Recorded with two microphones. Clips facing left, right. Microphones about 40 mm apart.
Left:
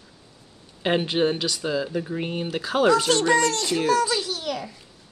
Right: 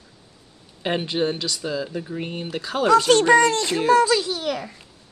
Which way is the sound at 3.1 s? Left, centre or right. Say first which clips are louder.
Right 5 dB; right.